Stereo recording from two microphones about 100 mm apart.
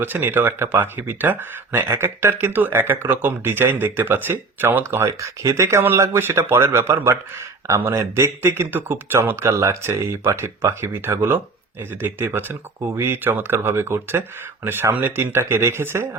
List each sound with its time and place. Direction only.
0.0 s speech: 20° right (ahead or behind)